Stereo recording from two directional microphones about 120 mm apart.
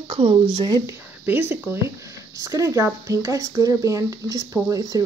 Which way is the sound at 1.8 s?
25° right (ahead or behind).